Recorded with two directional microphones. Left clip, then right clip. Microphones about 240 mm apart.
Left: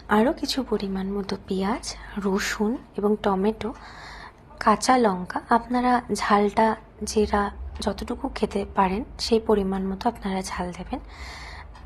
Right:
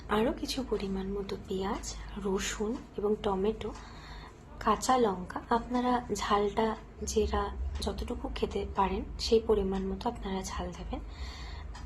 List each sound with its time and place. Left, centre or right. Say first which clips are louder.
0.1 s a woman's voice: left 8 dB; left